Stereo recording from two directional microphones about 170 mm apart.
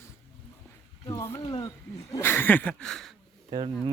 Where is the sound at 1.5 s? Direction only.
20° left (ahead or behind); by 3.1 s 5° left (ahead or behind).